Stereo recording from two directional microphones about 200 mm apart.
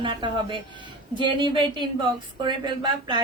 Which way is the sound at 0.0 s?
25° right (ahead or behind).